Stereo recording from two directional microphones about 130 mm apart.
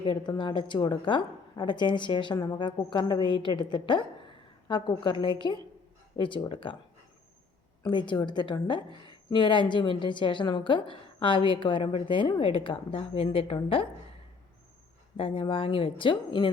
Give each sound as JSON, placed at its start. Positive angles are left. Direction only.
{"t": 0.0, "sound": "a woman's voice", "side_deg": 35}
{"t": 7.9, "sound": "a woman's voice", "side_deg": 35}
{"t": 15.1, "sound": "speech", "side_deg": 45}